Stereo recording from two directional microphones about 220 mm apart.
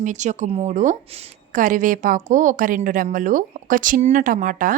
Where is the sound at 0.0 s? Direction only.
35° right (ahead or behind).